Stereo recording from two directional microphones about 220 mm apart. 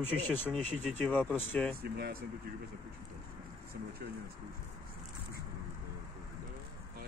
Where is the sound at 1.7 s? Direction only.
45° right (ahead or behind).